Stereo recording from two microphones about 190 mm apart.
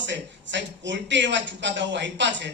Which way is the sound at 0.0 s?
70° right (ahead or behind).